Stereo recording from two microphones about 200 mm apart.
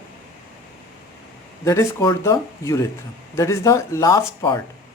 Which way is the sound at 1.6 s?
15° left (ahead or behind).